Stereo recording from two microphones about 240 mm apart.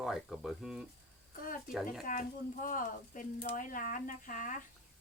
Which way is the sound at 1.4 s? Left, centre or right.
Left.